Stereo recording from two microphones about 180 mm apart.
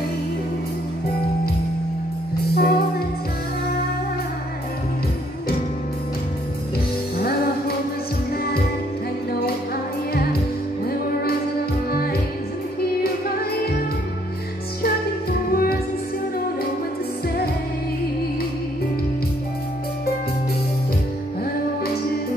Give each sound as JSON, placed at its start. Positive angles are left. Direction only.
{"t": 2.5, "sound": "music", "side_deg": 55}
{"t": 7.2, "sound": "music", "side_deg": 60}
{"t": 11.9, "sound": "music", "side_deg": 60}
{"t": 15.5, "sound": "music", "side_deg": 55}